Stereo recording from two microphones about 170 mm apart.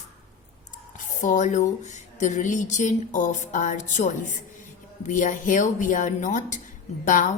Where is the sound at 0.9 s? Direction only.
50° left (ahead or behind).